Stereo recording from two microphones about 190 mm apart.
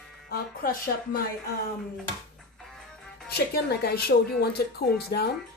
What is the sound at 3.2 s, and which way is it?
Speech, 55° left (ahead or behind).